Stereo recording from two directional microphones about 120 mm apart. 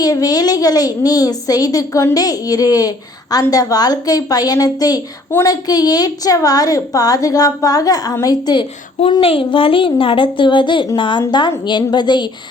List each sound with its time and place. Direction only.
0.0 s a woman's voice: 30° left (ahead or behind)
9.2 s a woman's voice: 50° left (ahead or behind)